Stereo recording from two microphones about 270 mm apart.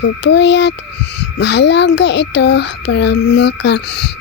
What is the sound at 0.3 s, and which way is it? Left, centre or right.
A child's voice, left.